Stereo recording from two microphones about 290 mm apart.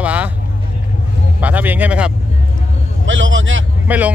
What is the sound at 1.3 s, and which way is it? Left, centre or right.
Speech, centre.